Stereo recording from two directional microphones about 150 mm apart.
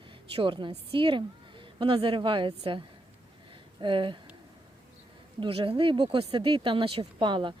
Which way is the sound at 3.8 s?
35° right (ahead or behind).